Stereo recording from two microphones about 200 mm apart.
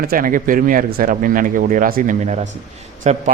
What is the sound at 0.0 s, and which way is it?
A man's voice, 45° right (ahead or behind).